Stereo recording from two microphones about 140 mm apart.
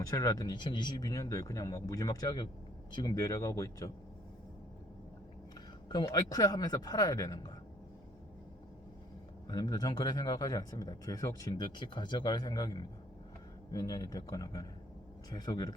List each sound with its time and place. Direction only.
0.0 s speech: 25° left (ahead or behind)
5.9 s speech: 30° left (ahead or behind)
9.5 s speech: 30° left (ahead or behind)